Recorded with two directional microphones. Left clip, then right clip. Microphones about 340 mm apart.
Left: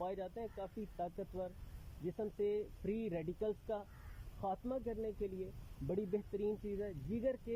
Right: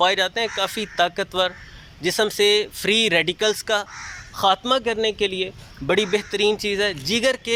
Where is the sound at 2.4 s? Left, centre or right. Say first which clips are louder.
Right 18 dB; right.